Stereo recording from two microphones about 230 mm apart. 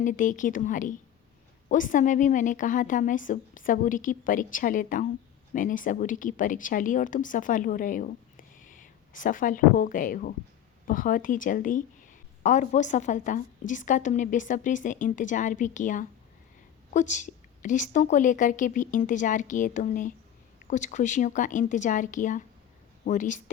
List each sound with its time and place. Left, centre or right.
0.0 s speech: left